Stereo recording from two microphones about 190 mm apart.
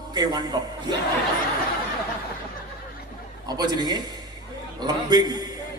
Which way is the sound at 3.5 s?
20° right (ahead or behind).